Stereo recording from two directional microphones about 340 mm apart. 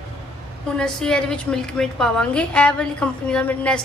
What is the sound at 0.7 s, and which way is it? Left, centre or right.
A woman's voice, centre.